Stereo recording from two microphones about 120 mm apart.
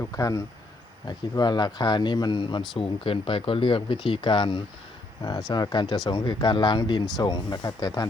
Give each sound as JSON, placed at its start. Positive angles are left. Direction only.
{"t": 0.0, "sound": "speech", "side_deg": 30}